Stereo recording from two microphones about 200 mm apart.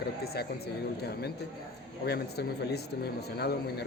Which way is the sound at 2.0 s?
55° left (ahead or behind).